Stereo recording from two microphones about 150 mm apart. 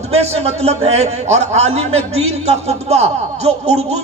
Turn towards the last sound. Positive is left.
turn(degrees=-45)  # may be behind; listen again after turning